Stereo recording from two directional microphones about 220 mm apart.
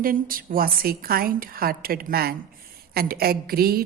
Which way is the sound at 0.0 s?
40° right (ahead or behind).